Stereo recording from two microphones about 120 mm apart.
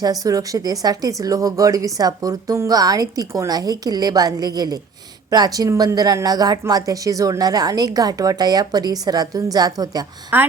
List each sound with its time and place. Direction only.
0.0 s speech: 30° right (ahead or behind)